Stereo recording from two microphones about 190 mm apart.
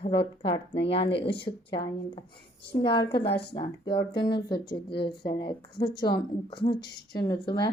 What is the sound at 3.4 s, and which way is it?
A woman's voice, 30° left (ahead or behind).